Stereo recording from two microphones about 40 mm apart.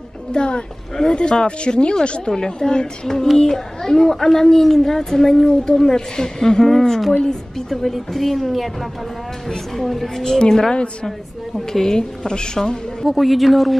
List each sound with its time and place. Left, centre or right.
0.3 s a child's voice: left
13.0 s a woman's voice: centre